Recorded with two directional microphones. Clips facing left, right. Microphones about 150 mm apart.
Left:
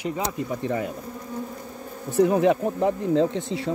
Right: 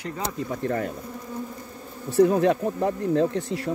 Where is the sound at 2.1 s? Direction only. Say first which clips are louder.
Even; 15° left (ahead or behind).